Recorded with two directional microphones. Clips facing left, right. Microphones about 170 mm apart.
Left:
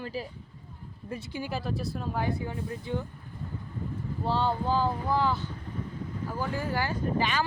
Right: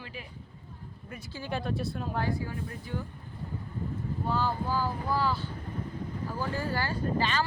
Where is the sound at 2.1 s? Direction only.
20° left (ahead or behind).